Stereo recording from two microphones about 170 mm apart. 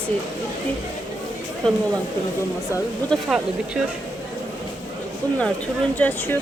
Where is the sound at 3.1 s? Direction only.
5° right (ahead or behind).